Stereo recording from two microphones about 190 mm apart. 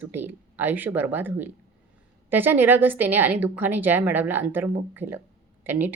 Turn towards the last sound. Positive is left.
turn(degrees=-10)  # may be behind; listen again after turning